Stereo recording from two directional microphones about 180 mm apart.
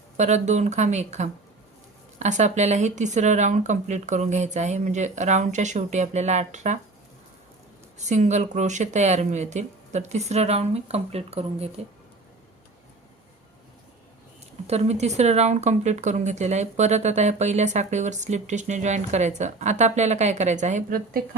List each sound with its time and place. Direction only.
0.2 s speech: 40° right (ahead or behind)
7.9 s speech: 40° right (ahead or behind)
14.7 s speech: 35° right (ahead or behind)